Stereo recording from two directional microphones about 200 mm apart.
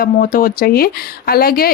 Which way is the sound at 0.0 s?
45° left (ahead or behind).